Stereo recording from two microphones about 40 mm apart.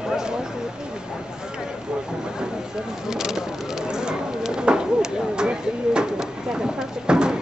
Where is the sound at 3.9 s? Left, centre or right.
Centre.